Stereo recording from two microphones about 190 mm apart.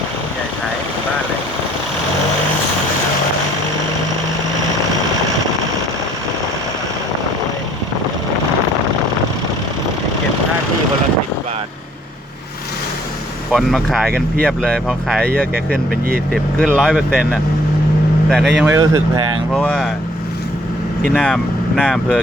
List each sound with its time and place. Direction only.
13.5 s speech: centre (ahead or behind)
16.3 s speech: 5° left (ahead or behind)
18.3 s speech: centre (ahead or behind)
18.6 s speech: 15° right (ahead or behind)
19.5 s speech: 5° left (ahead or behind)
21.1 s speech: 5° left (ahead or behind)